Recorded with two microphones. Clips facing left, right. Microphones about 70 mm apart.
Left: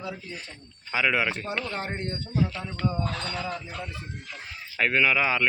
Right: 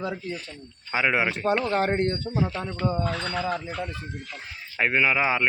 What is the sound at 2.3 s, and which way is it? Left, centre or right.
Speech, right.